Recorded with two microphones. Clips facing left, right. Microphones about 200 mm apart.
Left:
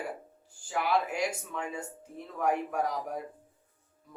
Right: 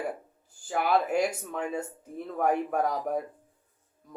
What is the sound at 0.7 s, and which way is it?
Speech, 50° right (ahead or behind).